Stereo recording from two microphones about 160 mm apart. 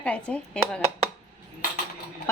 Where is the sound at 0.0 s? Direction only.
5° left (ahead or behind).